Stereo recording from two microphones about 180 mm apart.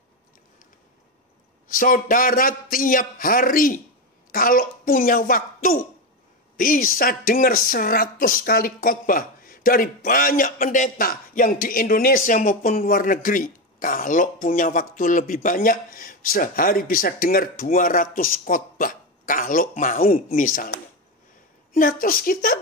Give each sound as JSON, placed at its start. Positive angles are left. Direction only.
{"t": 1.7, "sound": "a woman's voice", "side_deg": 50}